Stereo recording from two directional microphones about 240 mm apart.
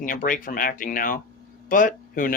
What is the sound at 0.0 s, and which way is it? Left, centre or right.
Speech, left.